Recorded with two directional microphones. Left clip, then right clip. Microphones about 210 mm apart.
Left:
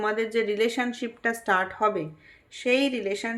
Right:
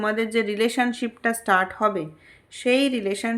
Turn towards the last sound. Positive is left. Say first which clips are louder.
# right 3 dB
turn(degrees=-30)  # may be behind; listen again after turning